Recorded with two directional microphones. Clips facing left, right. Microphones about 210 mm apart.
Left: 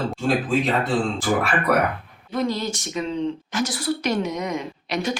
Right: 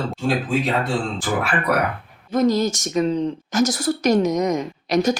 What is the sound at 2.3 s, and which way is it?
A woman's voice, 40° right (ahead or behind).